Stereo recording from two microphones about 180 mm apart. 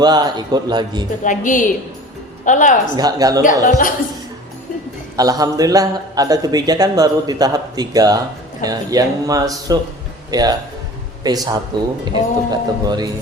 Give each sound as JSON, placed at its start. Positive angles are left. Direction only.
{"t": 0.0, "sound": "a man's voice", "side_deg": -25}
{"t": 1.2, "sound": "a woman's voice", "side_deg": 45}
{"t": 2.9, "sound": "a man's voice", "side_deg": -20}
{"t": 3.4, "sound": "speech", "side_deg": 50}
{"t": 5.1, "sound": "a man's voice", "side_deg": -20}